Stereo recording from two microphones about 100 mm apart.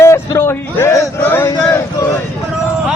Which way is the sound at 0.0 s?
25° left (ahead or behind).